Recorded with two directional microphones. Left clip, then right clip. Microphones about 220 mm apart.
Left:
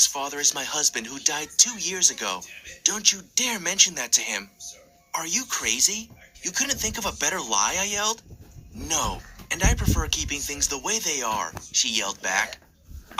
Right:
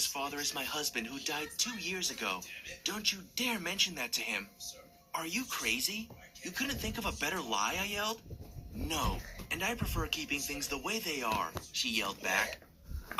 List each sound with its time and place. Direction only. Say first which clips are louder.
0.0 s speech: left 12 dB; 35° left (ahead or behind)